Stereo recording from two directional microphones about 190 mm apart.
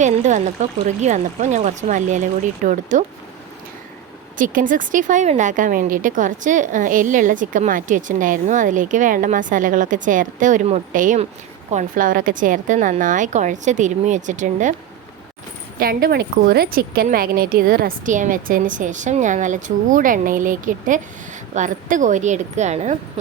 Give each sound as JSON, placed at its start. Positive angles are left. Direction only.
{"t": 0.0, "sound": "a woman's voice", "side_deg": -40}
{"t": 4.4, "sound": "a woman's voice", "side_deg": -45}
{"t": 15.8, "sound": "a woman's voice", "side_deg": -50}